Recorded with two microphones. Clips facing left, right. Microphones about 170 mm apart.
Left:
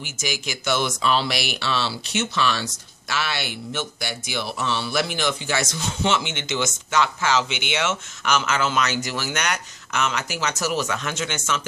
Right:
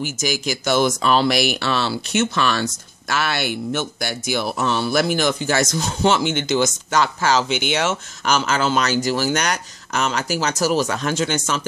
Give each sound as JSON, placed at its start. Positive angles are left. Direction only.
{"t": 0.0, "sound": "speech", "side_deg": -40}